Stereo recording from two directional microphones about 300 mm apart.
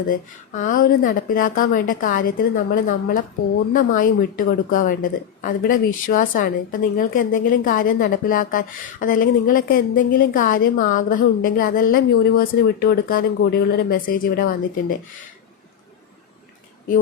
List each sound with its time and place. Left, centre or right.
0.1 s speech: left